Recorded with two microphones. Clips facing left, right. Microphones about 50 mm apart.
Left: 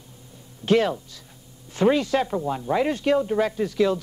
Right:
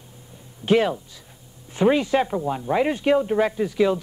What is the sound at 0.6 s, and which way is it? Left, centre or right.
Speech, centre.